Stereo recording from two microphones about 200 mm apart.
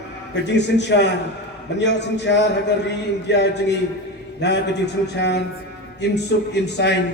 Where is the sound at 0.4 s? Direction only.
60° left (ahead or behind).